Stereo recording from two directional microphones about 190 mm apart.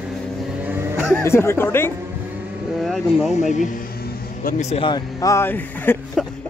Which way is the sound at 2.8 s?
Centre (ahead or behind).